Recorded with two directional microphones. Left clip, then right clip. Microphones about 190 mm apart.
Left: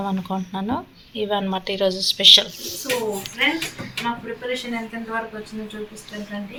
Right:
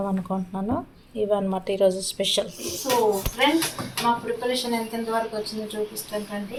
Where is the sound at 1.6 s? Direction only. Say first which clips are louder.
Even; 15° right (ahead or behind).